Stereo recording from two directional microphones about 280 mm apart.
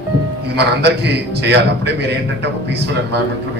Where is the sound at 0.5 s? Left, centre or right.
Right.